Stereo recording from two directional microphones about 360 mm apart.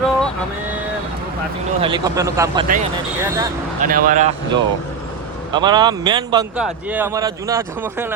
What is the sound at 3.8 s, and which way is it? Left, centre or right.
A man's voice, right.